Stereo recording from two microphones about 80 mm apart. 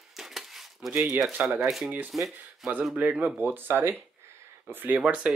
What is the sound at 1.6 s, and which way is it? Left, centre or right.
Speech, centre.